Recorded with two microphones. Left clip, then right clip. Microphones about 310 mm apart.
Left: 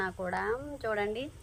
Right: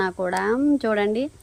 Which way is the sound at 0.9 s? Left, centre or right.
Right.